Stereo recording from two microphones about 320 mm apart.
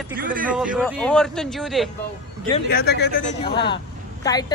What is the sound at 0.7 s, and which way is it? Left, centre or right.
Speech, centre.